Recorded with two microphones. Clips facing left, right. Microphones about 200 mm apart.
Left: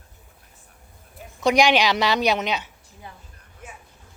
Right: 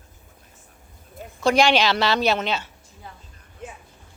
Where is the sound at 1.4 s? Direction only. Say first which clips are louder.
Even; 15° left (ahead or behind).